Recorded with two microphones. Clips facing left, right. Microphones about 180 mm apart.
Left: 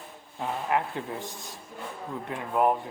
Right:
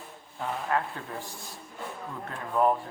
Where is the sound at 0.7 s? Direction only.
15° left (ahead or behind).